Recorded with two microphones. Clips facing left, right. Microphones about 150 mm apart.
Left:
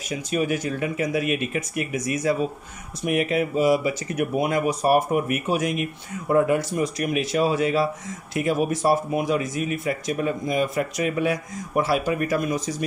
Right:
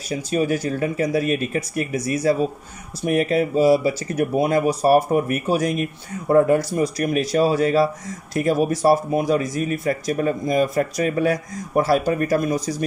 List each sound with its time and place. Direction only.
0.1 s speech: 35° right (ahead or behind)